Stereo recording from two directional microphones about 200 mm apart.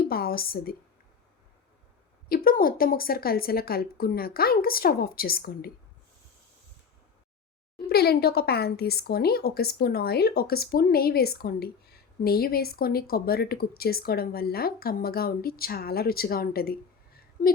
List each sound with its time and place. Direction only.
0.0 s a woman's voice: 50° left (ahead or behind)
2.3 s speech: 45° left (ahead or behind)
7.9 s speech: 55° left (ahead or behind)